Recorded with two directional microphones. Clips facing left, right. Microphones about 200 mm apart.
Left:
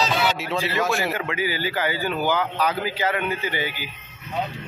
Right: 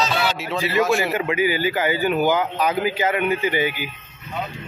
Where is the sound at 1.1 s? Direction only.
15° right (ahead or behind).